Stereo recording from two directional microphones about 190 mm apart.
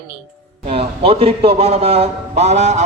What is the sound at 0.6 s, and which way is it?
A man's voice, 35° right (ahead or behind).